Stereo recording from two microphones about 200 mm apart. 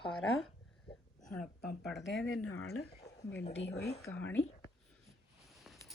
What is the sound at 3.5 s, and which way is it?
Speech, 65° left (ahead or behind).